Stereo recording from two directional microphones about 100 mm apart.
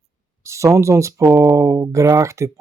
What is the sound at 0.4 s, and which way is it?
Speech, 30° right (ahead or behind).